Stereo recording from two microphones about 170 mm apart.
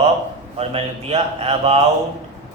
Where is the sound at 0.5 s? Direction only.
35° right (ahead or behind).